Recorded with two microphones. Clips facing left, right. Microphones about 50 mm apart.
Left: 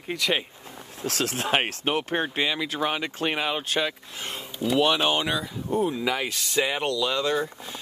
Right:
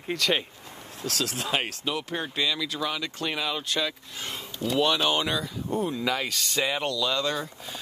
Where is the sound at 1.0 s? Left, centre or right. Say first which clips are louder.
Left 3 dB; left; by 7.8 s centre.